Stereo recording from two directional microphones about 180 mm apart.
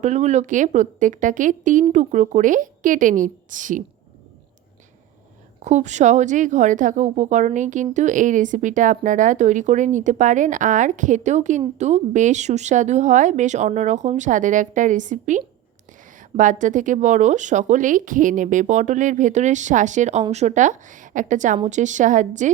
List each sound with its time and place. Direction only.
0.0 s a woman's voice: 40° right (ahead or behind)
5.6 s a woman's voice: 40° right (ahead or behind)